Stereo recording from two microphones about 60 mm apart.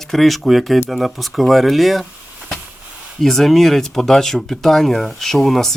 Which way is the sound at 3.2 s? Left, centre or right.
Centre.